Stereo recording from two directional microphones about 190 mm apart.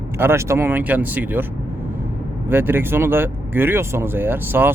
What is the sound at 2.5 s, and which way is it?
Speech, 10° right (ahead or behind).